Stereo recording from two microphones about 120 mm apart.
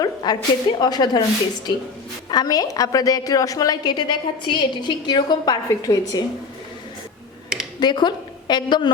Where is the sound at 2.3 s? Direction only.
35° left (ahead or behind).